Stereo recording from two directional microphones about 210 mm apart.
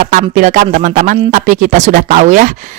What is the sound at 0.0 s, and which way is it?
Speech, 40° right (ahead or behind).